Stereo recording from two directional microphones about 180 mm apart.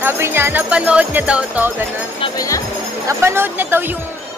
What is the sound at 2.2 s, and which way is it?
Speech, 20° left (ahead or behind).